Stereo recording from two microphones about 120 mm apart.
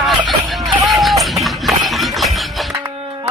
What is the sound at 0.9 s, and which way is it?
Music, centre (ahead or behind).